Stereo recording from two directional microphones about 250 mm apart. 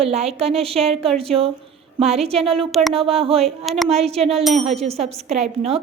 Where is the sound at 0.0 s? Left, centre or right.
Right.